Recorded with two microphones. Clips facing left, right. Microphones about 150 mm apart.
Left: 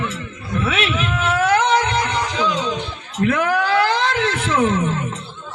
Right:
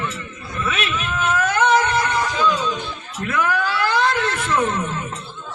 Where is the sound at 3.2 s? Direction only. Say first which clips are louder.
Left 4 dB; 65° left (ahead or behind).